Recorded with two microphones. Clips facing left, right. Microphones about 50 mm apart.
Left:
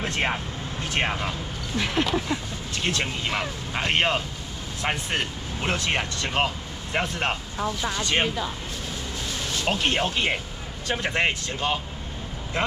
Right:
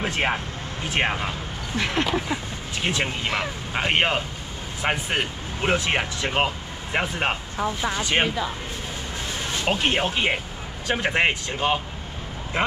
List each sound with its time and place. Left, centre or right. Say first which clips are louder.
0.0 s speech: right 2 dB; centre
9.5 s music: right 2 dB; right
9.8 s speech: right 1 dB; centre